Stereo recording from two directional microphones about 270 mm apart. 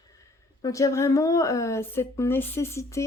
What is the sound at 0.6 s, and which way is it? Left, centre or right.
Speech, centre.